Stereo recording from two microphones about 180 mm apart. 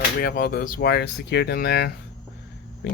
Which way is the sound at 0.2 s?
55° left (ahead or behind).